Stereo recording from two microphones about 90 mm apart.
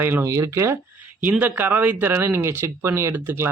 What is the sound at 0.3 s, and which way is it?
Speech, 35° right (ahead or behind).